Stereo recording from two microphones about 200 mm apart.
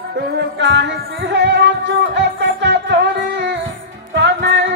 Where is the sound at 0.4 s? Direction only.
60° right (ahead or behind).